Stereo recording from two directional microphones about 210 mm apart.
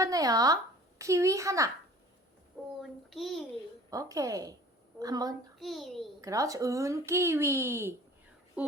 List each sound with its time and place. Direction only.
0.0 s speech: 15° right (ahead or behind)
3.1 s a child's voice: centre (ahead or behind)
3.8 s speech: 15° right (ahead or behind)
5.5 s a child's voice: centre (ahead or behind)
6.2 s speech: 15° right (ahead or behind)